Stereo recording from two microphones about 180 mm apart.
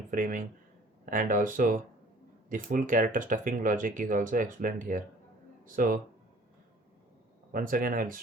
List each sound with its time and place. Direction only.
0.1 s speech: 50° right (ahead or behind)
7.5 s speech: 50° right (ahead or behind)